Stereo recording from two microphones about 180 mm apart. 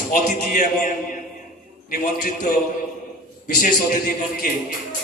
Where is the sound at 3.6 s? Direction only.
50° left (ahead or behind).